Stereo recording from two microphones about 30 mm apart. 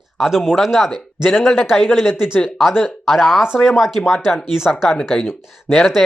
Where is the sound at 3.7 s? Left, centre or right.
Centre.